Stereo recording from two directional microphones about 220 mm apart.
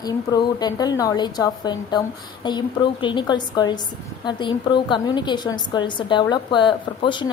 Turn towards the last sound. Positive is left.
turn(degrees=20)  # may be behind; listen again after turning